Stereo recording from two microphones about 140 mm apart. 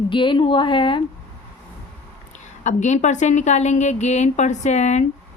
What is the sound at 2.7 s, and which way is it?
A woman's voice, 60° left (ahead or behind).